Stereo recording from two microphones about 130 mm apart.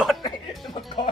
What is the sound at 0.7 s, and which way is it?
Speech, 40° left (ahead or behind).